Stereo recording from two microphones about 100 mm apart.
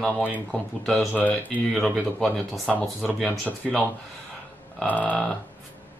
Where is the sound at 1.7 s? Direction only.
5° left (ahead or behind).